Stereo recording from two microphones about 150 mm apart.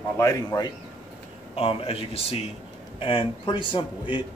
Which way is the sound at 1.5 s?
40° left (ahead or behind).